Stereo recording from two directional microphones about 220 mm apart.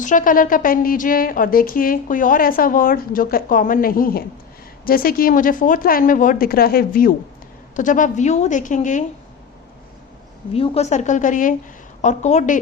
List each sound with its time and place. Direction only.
0.0 s a woman's voice: 35° left (ahead or behind)
10.5 s a woman's voice: 25° left (ahead or behind)